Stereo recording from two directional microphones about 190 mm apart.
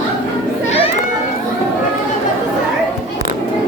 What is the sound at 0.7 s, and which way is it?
Children playing, 30° left (ahead or behind).